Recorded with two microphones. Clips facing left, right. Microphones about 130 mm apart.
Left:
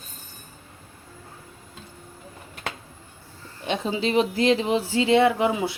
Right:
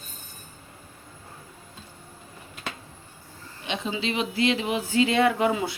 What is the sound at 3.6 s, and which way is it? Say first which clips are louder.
Speech: left 4 dB; 40° left (ahead or behind).